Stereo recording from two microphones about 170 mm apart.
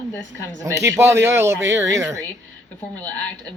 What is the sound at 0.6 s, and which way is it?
Speech, 20° right (ahead or behind).